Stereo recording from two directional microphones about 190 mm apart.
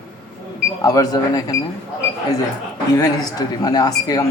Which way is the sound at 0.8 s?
20° left (ahead or behind).